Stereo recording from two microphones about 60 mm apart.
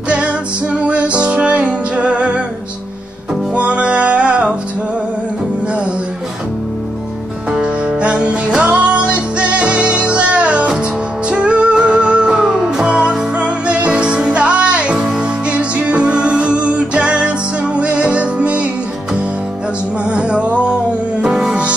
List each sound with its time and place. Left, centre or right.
0.8 s music: centre
3.5 s music: centre
7.5 s music: centre
20.1 s music: centre
21.2 s music: centre